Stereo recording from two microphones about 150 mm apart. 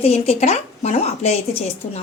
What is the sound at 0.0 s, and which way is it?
Speech, 45° left (ahead or behind).